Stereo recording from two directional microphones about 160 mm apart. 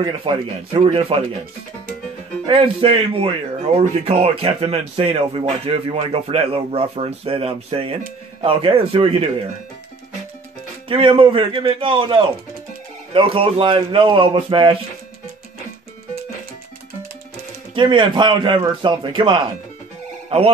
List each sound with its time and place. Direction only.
0.0 s speech: 30° right (ahead or behind)
2.4 s speech: 30° right (ahead or behind)
10.9 s speech: 35° right (ahead or behind)
17.7 s a man's voice: 30° right (ahead or behind)